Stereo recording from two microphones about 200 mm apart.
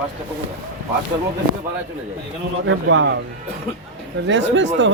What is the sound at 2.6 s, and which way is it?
Speech, 70° right (ahead or behind).